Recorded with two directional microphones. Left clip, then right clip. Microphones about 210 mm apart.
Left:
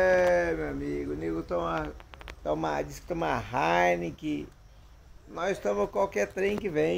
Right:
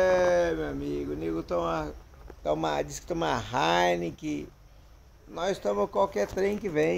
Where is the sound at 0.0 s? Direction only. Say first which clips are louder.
Even; 5° right (ahead or behind).